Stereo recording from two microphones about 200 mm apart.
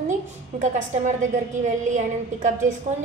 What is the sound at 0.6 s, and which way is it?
A woman's voice, 40° right (ahead or behind).